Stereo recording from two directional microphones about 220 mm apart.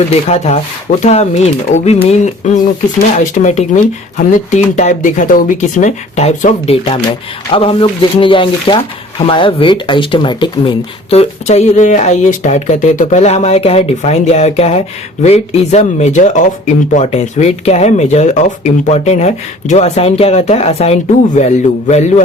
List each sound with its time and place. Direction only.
0.1 s speech: 30° left (ahead or behind)